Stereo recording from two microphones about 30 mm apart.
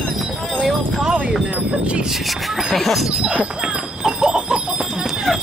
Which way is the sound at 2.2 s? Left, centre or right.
Centre.